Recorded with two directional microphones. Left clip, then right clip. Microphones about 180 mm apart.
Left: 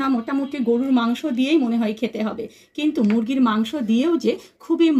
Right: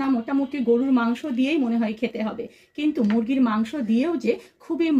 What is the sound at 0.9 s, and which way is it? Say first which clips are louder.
Speech: left 2 dB; 30° left (ahead or behind).